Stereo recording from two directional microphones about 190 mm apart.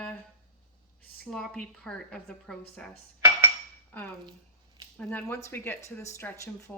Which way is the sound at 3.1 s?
15° right (ahead or behind).